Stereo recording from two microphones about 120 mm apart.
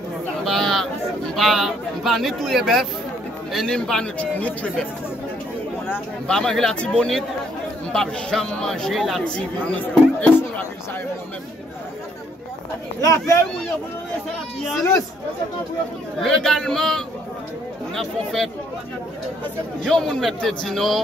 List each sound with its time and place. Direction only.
0.5 s a sound: centre (ahead or behind)
1.3 s speech: centre (ahead or behind)
6.2 s speech: 5° left (ahead or behind)
13.0 s speech: 25° left (ahead or behind)
16.2 s speech: 5° left (ahead or behind)
19.8 s speech: 5° left (ahead or behind)